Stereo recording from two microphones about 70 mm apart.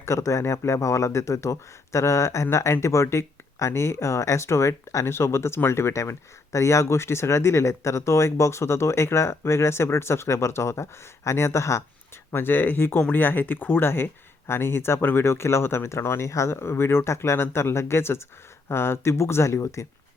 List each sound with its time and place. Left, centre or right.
0.0 s speech: left
12.3 s speech: left